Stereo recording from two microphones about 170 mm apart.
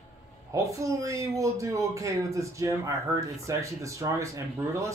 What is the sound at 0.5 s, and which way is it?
Speech, 20° right (ahead or behind).